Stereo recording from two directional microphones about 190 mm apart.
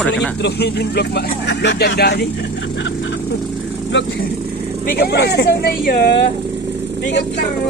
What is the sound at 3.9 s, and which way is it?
Speech, 70° left (ahead or behind).